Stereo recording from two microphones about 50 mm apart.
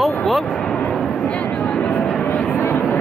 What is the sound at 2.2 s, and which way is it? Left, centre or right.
Vehicle, left.